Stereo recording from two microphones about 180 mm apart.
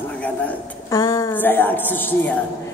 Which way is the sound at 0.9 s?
20° left (ahead or behind).